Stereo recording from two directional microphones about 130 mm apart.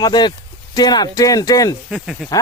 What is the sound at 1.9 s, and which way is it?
Speech, centre (ahead or behind).